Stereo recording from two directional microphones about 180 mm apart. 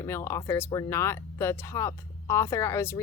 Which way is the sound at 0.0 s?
15° left (ahead or behind).